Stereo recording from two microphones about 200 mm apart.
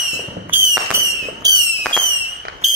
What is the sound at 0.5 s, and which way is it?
Fireworks, 10° right (ahead or behind).